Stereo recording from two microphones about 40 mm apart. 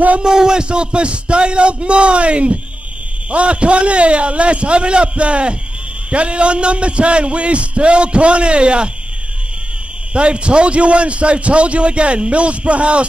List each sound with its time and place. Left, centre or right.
0.2 s a man's voice: centre
10.1 s a man's voice: right